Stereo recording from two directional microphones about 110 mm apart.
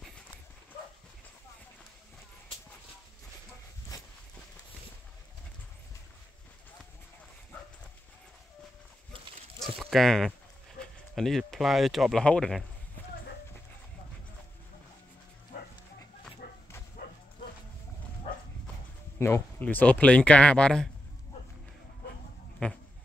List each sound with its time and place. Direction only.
3.9 s horse: 35° left (ahead or behind)
9.8 s speech: 5° left (ahead or behind)
19.1 s speech: 20° left (ahead or behind); by 20.9 s 5° left (ahead or behind)
22.6 s speech: 10° left (ahead or behind)